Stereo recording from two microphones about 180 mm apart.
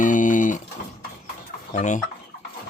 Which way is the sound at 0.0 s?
45° left (ahead or behind).